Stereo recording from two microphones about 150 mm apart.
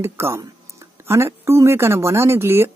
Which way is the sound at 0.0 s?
20° right (ahead or behind).